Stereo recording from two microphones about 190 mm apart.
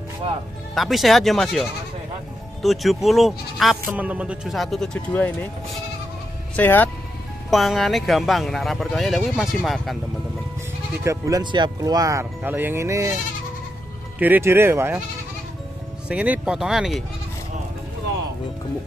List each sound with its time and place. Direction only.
0.7 s speech: centre (ahead or behind)
6.5 s speech: 10° left (ahead or behind)
11.1 s speech: 20° right (ahead or behind)
14.1 s speech: 10° right (ahead or behind)
16.1 s speech: 5° right (ahead or behind)